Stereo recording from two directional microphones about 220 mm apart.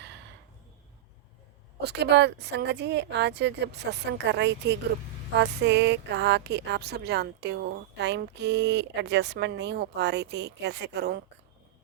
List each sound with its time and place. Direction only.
1.8 s speech: 50° right (ahead or behind)